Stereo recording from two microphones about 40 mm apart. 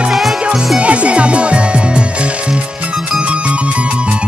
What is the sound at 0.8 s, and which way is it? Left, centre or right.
Music, right.